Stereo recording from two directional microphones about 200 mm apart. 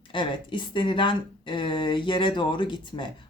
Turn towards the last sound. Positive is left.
turn(degrees=25)  # may be behind; listen again after turning